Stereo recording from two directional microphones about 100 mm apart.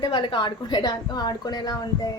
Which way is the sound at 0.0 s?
50° left (ahead or behind).